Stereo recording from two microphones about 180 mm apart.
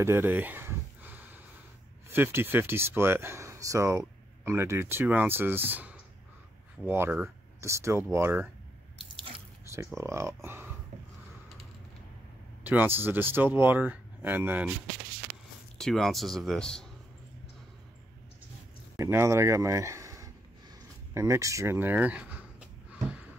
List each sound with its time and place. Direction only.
0.0 s a sound: 15° right (ahead or behind)
2.1 s speech: 10° right (ahead or behind)
9.9 s speech: 15° right (ahead or behind)
12.6 s speech: 10° right (ahead or behind)
15.8 s speech: centre (ahead or behind)
18.9 s speech: 15° right (ahead or behind)